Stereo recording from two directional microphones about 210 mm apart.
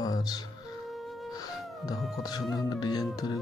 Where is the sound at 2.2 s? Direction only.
20° left (ahead or behind).